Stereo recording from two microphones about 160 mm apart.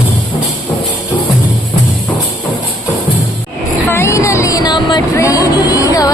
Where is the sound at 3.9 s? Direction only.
15° left (ahead or behind).